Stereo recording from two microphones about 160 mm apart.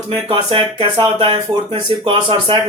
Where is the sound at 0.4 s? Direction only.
35° right (ahead or behind).